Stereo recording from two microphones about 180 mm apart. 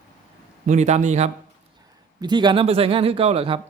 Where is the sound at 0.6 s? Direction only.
40° right (ahead or behind).